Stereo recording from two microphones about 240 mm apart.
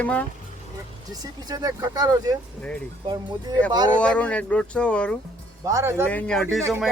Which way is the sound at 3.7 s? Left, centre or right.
Centre.